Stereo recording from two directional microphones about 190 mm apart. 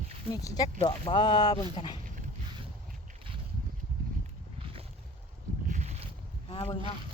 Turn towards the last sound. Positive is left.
turn(degrees=30)  # may be behind; listen again after turning